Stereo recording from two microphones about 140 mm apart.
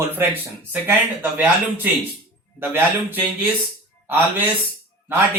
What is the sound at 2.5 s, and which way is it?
Speech, 15° right (ahead or behind).